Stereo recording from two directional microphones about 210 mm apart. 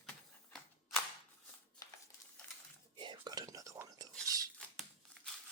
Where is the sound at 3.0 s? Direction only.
20° right (ahead or behind).